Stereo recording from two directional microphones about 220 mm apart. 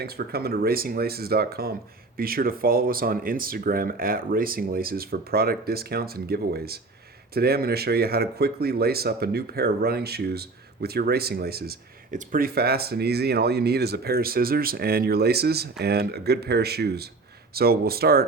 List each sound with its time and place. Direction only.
0.0 s speech: 45° right (ahead or behind)